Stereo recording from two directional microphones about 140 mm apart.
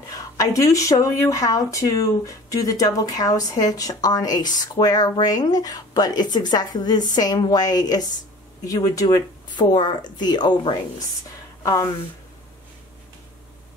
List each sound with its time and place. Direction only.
0.1 s speech: 25° left (ahead or behind)